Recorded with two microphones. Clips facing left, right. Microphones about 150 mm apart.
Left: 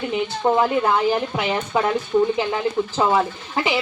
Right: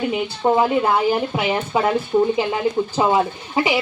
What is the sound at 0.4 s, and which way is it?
Speech, 10° right (ahead or behind).